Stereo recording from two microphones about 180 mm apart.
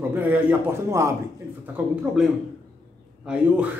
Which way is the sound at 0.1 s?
10° right (ahead or behind).